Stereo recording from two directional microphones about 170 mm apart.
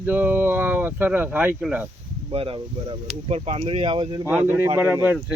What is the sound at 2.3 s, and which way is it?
Speech, 35° right (ahead or behind).